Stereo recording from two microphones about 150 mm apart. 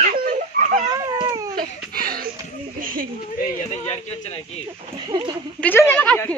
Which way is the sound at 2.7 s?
70° right (ahead or behind).